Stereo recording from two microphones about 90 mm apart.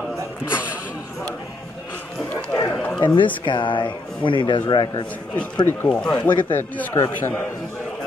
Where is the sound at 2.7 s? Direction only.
20° left (ahead or behind).